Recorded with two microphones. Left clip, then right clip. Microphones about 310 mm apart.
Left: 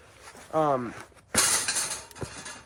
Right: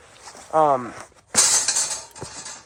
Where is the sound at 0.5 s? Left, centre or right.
Centre.